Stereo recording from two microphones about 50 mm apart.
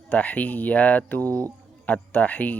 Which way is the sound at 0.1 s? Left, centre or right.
Left.